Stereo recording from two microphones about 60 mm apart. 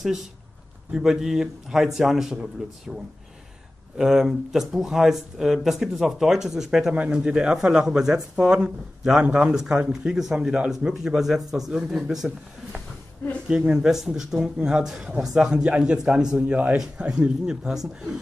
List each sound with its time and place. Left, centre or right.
0.0 s a man's voice: centre
4.0 s speech: centre
13.5 s speech: centre